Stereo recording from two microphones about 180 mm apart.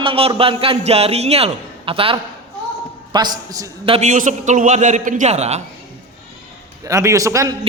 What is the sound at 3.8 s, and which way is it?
A man's voice, 35° right (ahead or behind).